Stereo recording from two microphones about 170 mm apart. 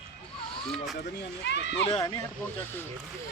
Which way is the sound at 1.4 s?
90° left.